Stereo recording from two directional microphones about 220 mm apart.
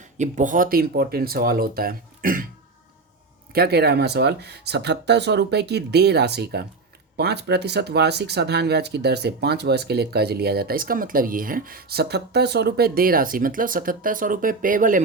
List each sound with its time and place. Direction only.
0.2 s speech: 35° right (ahead or behind)
3.5 s speech: 45° right (ahead or behind)